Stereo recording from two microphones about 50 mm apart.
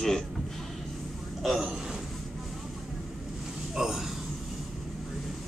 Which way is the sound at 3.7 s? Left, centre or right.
Centre.